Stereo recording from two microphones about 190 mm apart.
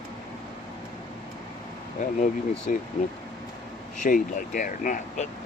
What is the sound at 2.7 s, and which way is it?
Speech, 45° left (ahead or behind).